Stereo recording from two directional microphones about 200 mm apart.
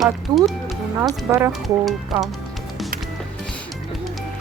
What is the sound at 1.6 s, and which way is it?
Speech, centre (ahead or behind).